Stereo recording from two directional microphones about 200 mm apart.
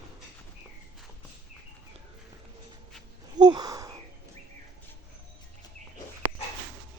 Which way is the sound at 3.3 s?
20° right (ahead or behind).